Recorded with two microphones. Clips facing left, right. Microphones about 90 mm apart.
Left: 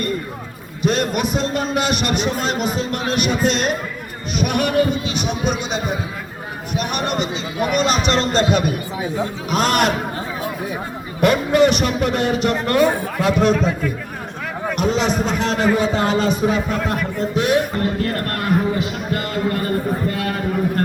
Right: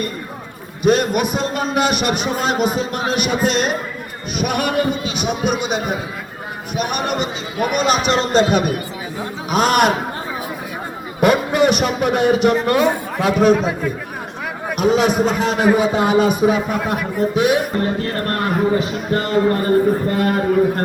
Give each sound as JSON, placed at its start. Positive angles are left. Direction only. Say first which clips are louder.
{"t": 0.8, "sound": "a man's voice", "louder": "right 4 dB", "side_deg": -5}
{"t": 9.5, "sound": "a man's voice", "louder": "right 3 dB", "side_deg": -5}
{"t": 11.2, "sound": "a man's voice", "louder": "even", "side_deg": -5}
{"t": 18.3, "sound": "speech", "louder": "right 4 dB", "side_deg": -30}